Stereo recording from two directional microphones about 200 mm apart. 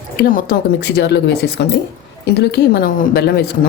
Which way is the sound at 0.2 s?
45° left (ahead or behind).